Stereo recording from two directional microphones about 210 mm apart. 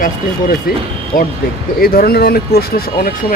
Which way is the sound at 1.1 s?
40° left (ahead or behind).